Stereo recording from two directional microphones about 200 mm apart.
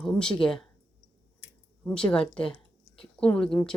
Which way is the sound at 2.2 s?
25° left (ahead or behind).